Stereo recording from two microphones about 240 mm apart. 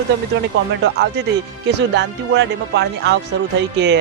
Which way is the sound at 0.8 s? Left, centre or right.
Right.